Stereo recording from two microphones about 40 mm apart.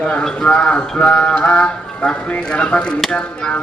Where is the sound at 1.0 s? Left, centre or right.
Left.